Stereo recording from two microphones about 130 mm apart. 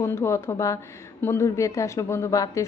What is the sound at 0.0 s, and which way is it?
Speech, 20° left (ahead or behind).